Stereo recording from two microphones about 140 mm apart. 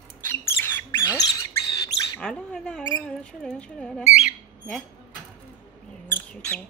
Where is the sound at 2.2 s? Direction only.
5° left (ahead or behind).